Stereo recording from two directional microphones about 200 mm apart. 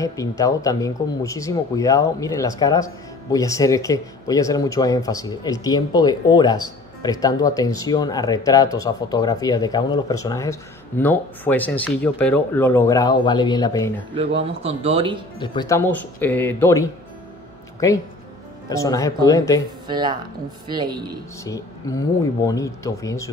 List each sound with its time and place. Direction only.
0.0 s speech: 15° left (ahead or behind)
14.4 s speech: 30° right (ahead or behind)
15.3 s speech: 25° left (ahead or behind)
19.9 s speech: 20° right (ahead or behind)
21.5 s speech: 15° left (ahead or behind)